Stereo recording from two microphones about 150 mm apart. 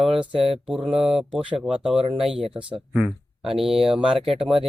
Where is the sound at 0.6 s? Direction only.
5° right (ahead or behind).